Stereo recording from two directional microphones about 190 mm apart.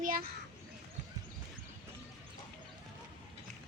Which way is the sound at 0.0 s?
45° right (ahead or behind).